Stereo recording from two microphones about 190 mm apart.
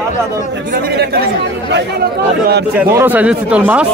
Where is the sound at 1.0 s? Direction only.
55° right (ahead or behind).